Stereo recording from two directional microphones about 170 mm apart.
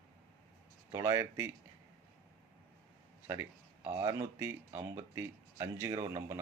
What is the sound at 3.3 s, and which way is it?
Speech, 15° right (ahead or behind).